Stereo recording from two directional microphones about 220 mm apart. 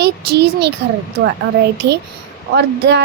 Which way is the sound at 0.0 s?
50° right (ahead or behind).